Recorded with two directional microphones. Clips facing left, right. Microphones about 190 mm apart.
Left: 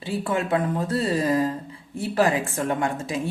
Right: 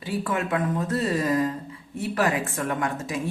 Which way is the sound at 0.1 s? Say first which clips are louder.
Left 2 dB; 25° left (ahead or behind).